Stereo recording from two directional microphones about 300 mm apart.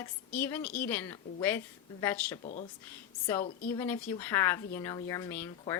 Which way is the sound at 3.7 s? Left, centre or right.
Centre.